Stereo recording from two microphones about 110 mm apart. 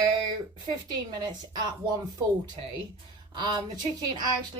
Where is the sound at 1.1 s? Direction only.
40° right (ahead or behind).